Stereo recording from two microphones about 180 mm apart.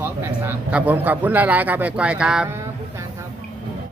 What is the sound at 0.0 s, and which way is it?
A man's voice, 10° right (ahead or behind).